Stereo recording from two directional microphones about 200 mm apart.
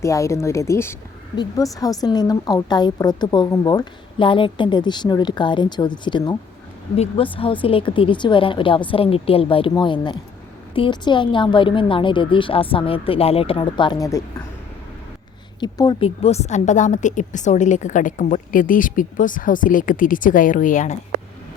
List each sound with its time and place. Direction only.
0.0 s a woman's voice: 15° left (ahead or behind)
15.6 s a woman's voice: 20° left (ahead or behind); by 20.9 s 40° left (ahead or behind)